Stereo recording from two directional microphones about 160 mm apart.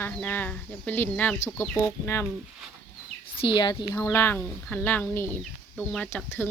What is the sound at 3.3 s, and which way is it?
Speech, 30° left (ahead or behind).